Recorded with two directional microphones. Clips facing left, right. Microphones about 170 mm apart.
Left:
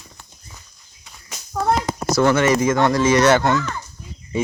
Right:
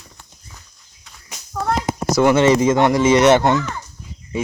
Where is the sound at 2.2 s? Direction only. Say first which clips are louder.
Right 2 dB; 15° right (ahead or behind).